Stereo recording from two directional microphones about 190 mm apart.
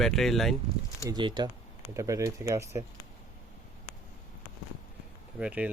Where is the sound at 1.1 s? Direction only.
25° right (ahead or behind).